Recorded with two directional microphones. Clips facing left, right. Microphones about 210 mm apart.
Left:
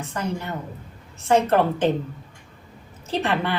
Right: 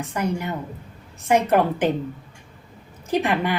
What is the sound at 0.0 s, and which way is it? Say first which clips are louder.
A woman's voice: right 3 dB; 15° right (ahead or behind).